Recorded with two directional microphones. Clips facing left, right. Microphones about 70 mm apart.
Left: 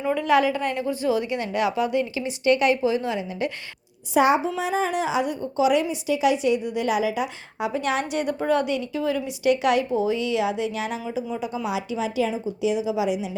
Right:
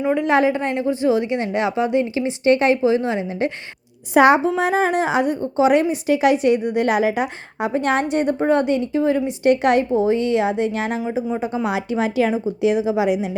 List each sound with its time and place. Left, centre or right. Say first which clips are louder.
0.0 s a woman's voice: right 3 dB; right
4.1 s a woman's voice: right 6 dB; right